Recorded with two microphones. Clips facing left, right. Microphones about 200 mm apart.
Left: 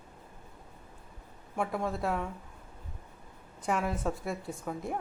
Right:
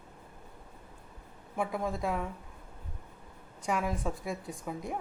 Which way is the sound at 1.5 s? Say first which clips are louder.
Left 1 dB; centre (ahead or behind).